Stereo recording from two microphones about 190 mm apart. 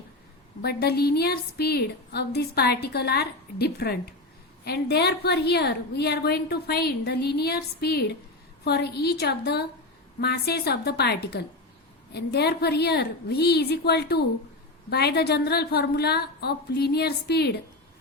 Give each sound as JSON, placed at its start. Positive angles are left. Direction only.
{"t": 0.6, "sound": "a woman's voice", "side_deg": 55}